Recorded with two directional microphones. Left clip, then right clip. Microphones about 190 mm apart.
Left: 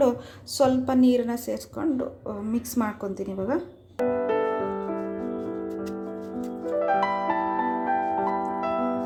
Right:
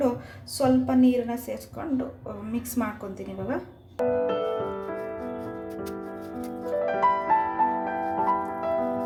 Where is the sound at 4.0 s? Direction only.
Centre (ahead or behind).